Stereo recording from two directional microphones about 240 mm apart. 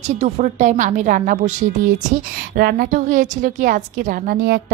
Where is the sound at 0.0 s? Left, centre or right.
Right.